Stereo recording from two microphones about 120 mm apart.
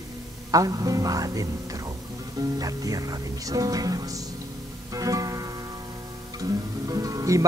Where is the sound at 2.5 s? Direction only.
30° right (ahead or behind).